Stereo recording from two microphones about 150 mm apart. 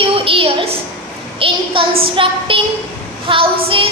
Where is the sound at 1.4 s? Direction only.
35° right (ahead or behind).